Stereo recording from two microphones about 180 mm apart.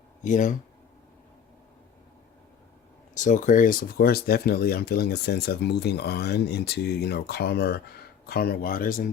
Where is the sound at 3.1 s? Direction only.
45° left (ahead or behind).